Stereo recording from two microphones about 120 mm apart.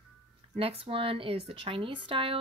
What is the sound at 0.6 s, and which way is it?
Speech, 50° right (ahead or behind).